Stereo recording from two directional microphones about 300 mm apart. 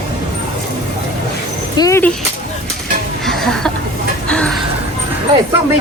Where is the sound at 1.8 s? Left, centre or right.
Centre.